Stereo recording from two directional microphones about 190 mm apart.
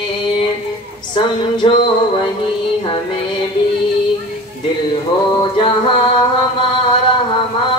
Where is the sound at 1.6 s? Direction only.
30° left (ahead or behind).